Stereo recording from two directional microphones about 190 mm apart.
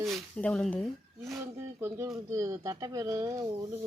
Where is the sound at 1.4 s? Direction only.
15° right (ahead or behind).